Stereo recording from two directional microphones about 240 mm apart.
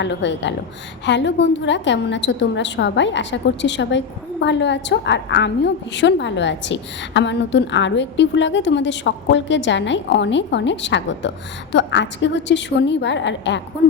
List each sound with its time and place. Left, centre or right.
0.0 s a woman's voice: left